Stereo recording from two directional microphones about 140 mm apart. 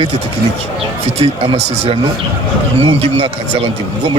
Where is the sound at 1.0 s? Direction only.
50° right (ahead or behind).